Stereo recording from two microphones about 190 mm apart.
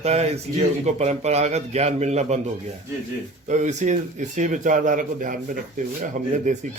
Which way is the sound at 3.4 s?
40° right (ahead or behind).